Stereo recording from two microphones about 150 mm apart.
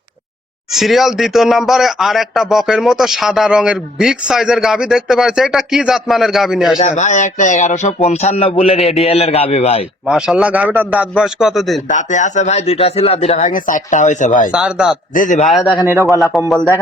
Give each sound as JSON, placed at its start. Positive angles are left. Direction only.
{"t": 0.7, "sound": "speech", "side_deg": 0}
{"t": 6.7, "sound": "speech", "side_deg": 50}
{"t": 10.1, "sound": "speech", "side_deg": -5}
{"t": 11.9, "sound": "speech", "side_deg": 55}
{"t": 14.5, "sound": "speech", "side_deg": -5}
{"t": 15.1, "sound": "a man's voice", "side_deg": 60}
{"t": 15.9, "sound": "speech", "side_deg": -15}
{"t": 16.5, "sound": "speech", "side_deg": 10}